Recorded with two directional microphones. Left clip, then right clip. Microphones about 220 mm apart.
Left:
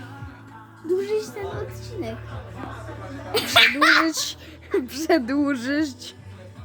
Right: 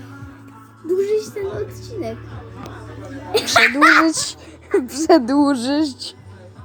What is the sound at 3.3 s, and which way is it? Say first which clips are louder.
Speech: right 3 dB; 20° left (ahead or behind).